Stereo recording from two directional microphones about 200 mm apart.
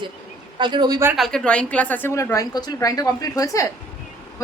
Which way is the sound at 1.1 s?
Centre (ahead or behind).